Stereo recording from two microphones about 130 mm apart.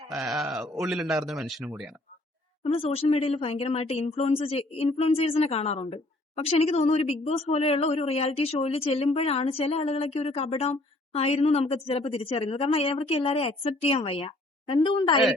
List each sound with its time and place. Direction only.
0.1 s speech: centre (ahead or behind)
2.6 s a woman's voice: 50° left (ahead or behind)
14.8 s speech: 40° left (ahead or behind)